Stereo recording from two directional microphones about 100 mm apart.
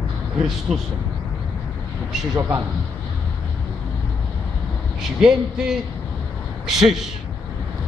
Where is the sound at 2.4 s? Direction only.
25° right (ahead or behind).